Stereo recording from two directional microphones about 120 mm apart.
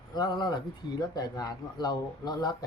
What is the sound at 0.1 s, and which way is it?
Speech, 35° left (ahead or behind).